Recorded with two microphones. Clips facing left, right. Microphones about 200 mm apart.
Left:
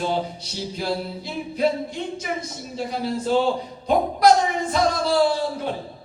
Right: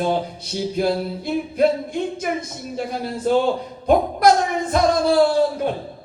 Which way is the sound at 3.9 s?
50° right (ahead or behind).